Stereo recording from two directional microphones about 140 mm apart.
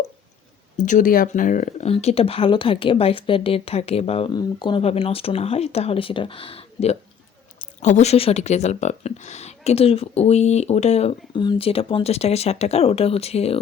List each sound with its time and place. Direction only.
0.8 s speech: 65° left (ahead or behind)
1.9 s speech: 45° left (ahead or behind)
4.3 s speech: 30° left (ahead or behind)
7.6 s speech: 60° left (ahead or behind)
11.3 s speech: 40° left (ahead or behind)